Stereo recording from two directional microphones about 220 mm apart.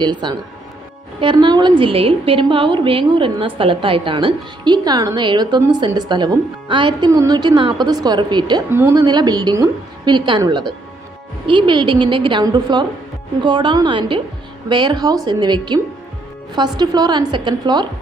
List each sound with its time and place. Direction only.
0.0 s a woman's voice: 20° right (ahead or behind)